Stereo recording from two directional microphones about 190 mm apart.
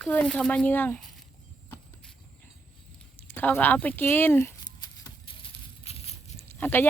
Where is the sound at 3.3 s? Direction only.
10° left (ahead or behind).